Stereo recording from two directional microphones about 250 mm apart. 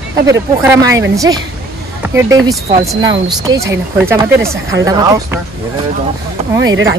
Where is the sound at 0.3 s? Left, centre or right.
Centre.